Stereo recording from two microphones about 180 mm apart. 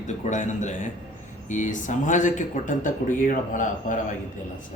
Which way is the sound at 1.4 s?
45° left (ahead or behind).